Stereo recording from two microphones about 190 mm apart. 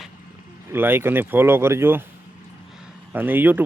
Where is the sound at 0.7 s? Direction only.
10° right (ahead or behind).